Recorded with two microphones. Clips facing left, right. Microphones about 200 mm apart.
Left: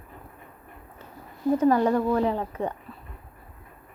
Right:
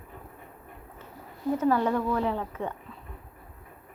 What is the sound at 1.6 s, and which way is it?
Speech, 15° left (ahead or behind).